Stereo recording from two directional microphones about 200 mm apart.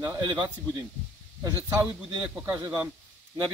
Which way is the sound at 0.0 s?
15° right (ahead or behind).